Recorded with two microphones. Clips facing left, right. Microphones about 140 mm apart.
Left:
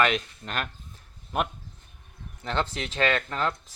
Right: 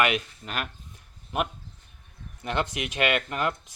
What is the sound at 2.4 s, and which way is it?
Speech, 15° right (ahead or behind).